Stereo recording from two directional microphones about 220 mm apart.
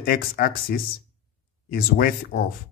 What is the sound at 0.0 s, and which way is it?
Speech, 40° left (ahead or behind).